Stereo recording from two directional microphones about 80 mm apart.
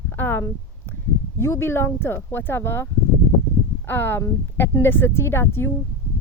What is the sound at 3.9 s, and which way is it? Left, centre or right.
Speech, left.